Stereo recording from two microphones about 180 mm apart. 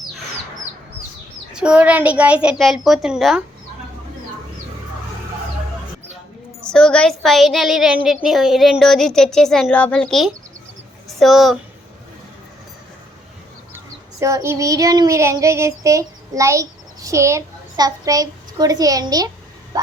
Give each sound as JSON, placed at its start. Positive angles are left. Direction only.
{"t": 1.5, "sound": "a woman's voice", "side_deg": -5}
{"t": 6.6, "sound": "a woman's voice", "side_deg": 5}
{"t": 13.7, "sound": "child singing", "side_deg": -15}
{"t": 19.7, "sound": "a sound", "side_deg": -20}